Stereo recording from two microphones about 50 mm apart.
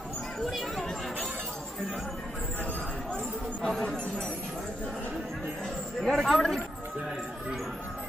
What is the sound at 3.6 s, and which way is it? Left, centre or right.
Chatter, centre.